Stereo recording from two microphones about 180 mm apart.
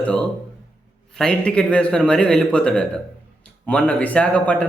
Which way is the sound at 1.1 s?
5° left (ahead or behind).